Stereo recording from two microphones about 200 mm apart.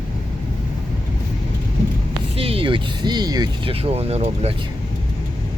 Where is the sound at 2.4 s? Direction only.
30° right (ahead or behind).